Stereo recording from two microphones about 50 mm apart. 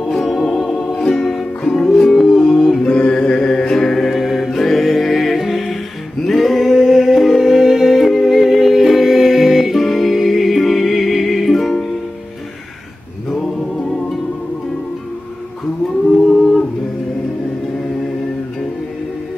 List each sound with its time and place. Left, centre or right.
0.3 s organ: centre
0.9 s music: centre
3.0 s mantra: left
3.3 s mantra: centre
4.4 s music: centre
6.2 s a capella: centre